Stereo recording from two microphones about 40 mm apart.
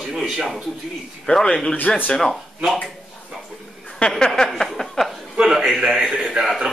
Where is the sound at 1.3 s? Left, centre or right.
Left.